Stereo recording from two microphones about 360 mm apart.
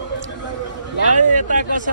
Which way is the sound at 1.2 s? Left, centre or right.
Right.